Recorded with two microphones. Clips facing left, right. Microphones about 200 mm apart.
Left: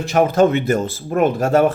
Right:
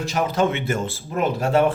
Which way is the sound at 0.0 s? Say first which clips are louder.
Left 7 dB; 55° left (ahead or behind).